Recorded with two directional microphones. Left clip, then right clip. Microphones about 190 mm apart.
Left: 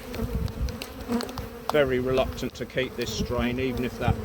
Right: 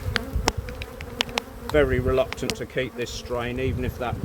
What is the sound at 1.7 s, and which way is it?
Speech, 60° right (ahead or behind).